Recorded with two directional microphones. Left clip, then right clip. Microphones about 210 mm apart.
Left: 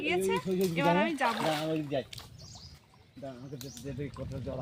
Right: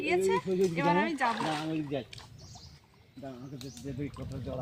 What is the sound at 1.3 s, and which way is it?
Speech, 55° left (ahead or behind).